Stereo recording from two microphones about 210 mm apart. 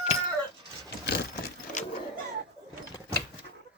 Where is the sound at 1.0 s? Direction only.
50° left (ahead or behind).